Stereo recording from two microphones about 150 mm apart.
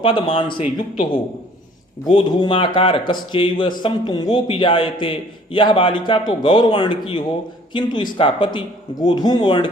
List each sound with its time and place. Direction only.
0.0 s speech: 35° left (ahead or behind)
2.1 s speech: 30° left (ahead or behind)